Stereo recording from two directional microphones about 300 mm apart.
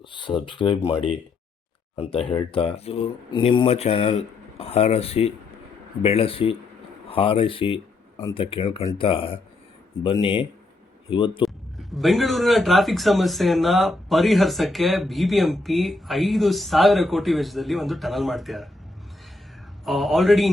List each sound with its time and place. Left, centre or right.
0.1 s speech: centre
2.0 s speech: centre
11.4 s speech: centre
19.8 s speech: centre